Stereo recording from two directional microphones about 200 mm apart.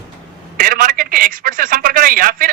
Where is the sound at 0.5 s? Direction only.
45° right (ahead or behind).